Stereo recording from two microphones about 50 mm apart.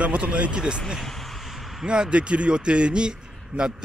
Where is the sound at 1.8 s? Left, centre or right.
Centre.